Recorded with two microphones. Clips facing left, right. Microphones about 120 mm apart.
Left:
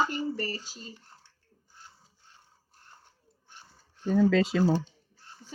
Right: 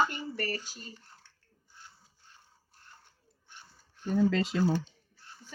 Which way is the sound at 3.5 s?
40° left (ahead or behind).